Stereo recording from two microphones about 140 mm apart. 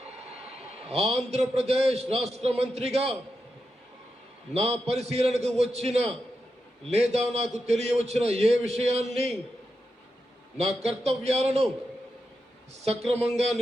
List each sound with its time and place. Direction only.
0.9 s a man's voice: 45° right (ahead or behind)
4.5 s a man's voice: 45° right (ahead or behind)
10.6 s a man's voice: 50° right (ahead or behind)
13.1 s a man's voice: 50° right (ahead or behind)